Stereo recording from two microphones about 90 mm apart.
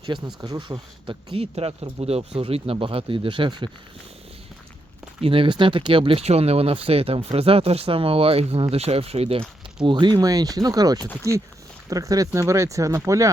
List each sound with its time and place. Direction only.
0.1 s speech: 60° right (ahead or behind)
0.4 s speech: 45° right (ahead or behind)
1.0 s speech: 90° right; by 3.7 s 65° right (ahead or behind)
5.2 s speech: 80° right
9.8 s speech: 60° right (ahead or behind)
11.3 s speech: 35° right (ahead or behind)